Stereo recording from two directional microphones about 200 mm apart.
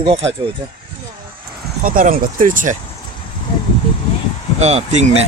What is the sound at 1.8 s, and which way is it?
Speech, 40° right (ahead or behind).